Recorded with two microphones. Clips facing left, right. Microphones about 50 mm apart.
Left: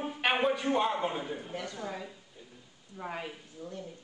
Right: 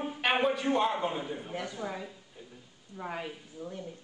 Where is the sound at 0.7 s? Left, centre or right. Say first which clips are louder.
Right 1 dB; centre.